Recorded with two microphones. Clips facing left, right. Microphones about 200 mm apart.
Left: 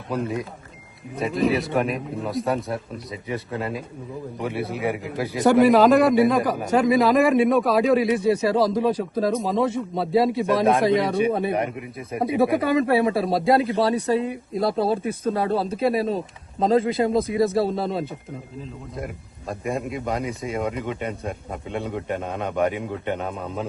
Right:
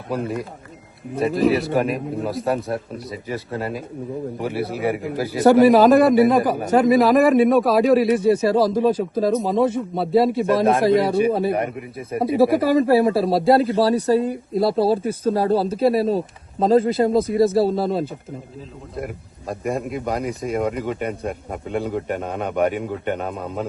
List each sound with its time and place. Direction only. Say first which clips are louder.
1.2 s speech: right 4 dB; centre (ahead or behind)
14.8 s speech: right 4 dB; 35° right (ahead or behind)
15.6 s speech: right 4 dB; centre (ahead or behind)
19.5 s speech: right 2 dB; centre (ahead or behind)